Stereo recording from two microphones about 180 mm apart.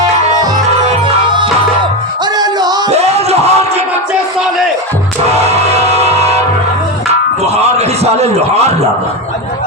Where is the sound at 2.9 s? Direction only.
35° right (ahead or behind).